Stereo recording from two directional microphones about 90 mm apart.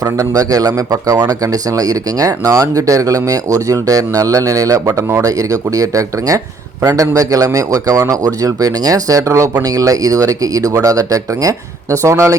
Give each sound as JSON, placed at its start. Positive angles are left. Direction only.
{"t": 0.0, "sound": "a man's voice", "side_deg": -40}